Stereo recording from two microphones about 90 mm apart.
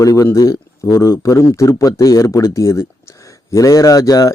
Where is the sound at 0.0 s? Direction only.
40° left (ahead or behind).